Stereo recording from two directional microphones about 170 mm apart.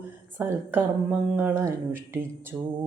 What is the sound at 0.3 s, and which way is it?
A woman's voice, 10° right (ahead or behind).